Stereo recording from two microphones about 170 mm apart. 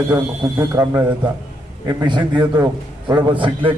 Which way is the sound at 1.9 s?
25° right (ahead or behind).